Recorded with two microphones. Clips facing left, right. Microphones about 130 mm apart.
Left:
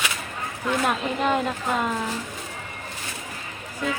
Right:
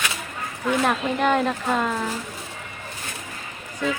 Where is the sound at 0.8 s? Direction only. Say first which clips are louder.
Right 2 dB; 5° left (ahead or behind).